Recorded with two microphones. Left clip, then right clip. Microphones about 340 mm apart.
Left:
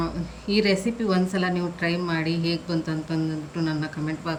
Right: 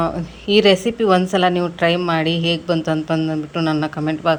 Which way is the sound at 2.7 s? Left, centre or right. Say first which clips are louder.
Right 10 dB; centre.